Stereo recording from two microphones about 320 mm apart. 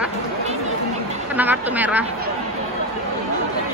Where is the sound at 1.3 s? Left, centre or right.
Centre.